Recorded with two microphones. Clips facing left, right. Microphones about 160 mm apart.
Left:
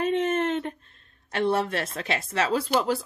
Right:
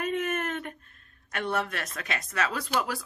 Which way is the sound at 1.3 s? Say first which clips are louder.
Left 6 dB; 30° left (ahead or behind).